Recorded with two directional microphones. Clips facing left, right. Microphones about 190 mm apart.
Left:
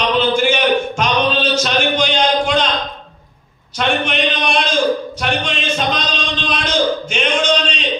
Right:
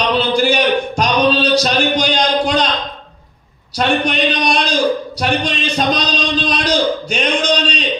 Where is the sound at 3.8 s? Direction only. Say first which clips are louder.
Right 2 dB; 35° right (ahead or behind).